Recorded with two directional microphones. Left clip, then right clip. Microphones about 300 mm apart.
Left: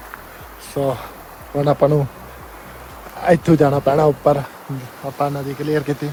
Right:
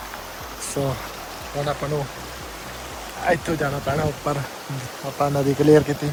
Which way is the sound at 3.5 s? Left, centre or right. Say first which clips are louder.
Left 9 dB; left.